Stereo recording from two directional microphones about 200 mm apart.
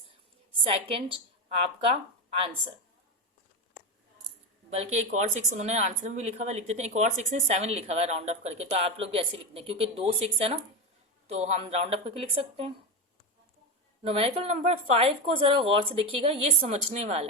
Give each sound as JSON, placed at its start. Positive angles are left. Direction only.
{"t": 0.6, "sound": "speech", "side_deg": -30}
{"t": 4.7, "sound": "speech", "side_deg": -35}
{"t": 14.0, "sound": "speech", "side_deg": -30}